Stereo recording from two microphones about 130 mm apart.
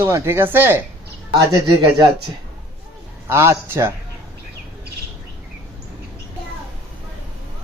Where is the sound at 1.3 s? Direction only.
30° right (ahead or behind).